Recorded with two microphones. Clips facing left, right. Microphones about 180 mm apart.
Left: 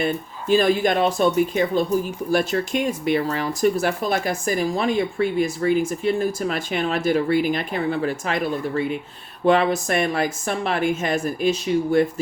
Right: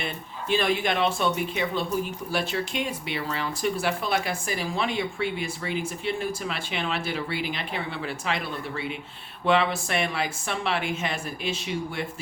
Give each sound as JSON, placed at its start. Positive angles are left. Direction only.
{"t": 0.0, "sound": "speech", "side_deg": 40}